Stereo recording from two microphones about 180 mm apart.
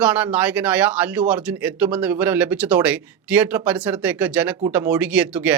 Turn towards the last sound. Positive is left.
turn(degrees=-10)  # may be behind; listen again after turning